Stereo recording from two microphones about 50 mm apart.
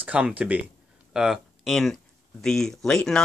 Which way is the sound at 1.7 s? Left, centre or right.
Centre.